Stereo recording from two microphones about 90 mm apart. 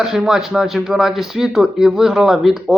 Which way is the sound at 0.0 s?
5° right (ahead or behind).